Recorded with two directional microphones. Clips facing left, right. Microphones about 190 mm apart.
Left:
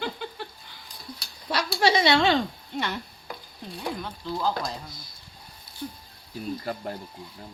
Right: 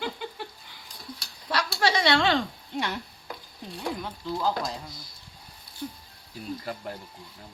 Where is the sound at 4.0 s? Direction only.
5° right (ahead or behind).